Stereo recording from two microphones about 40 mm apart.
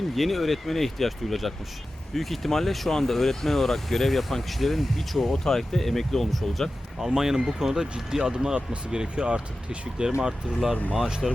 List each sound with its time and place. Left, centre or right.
0.2 s speech: centre
7.0 s speech: centre
11.2 s speech: centre